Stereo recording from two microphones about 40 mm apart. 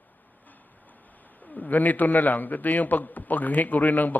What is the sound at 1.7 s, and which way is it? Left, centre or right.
A man's voice, left.